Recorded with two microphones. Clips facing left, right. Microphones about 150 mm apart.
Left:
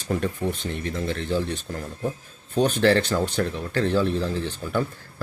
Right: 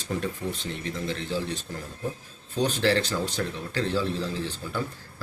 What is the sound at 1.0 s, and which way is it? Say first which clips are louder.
Speech: left 4 dB; 55° left (ahead or behind).